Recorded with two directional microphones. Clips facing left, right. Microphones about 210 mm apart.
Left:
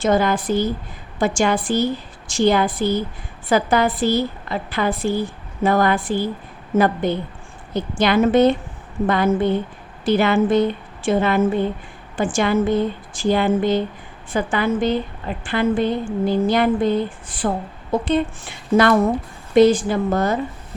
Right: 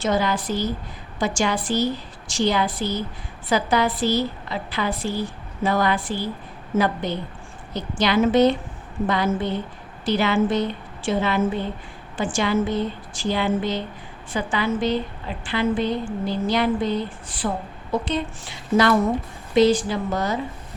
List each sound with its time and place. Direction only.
0.0 s a woman's voice: 50° left (ahead or behind)